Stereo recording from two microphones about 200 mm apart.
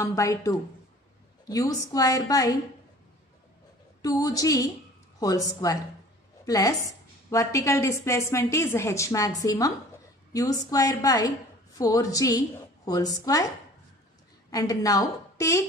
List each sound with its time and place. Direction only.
0.0 s a woman's voice: 15° left (ahead or behind)
4.0 s a woman's voice: 15° left (ahead or behind)
14.5 s a woman's voice: 15° left (ahead or behind)